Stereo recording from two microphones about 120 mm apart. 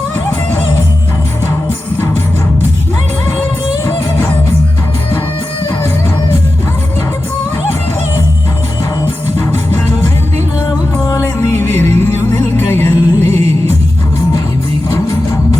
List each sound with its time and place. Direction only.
11.0 s music: 25° left (ahead or behind)
14.8 s music: 25° left (ahead or behind)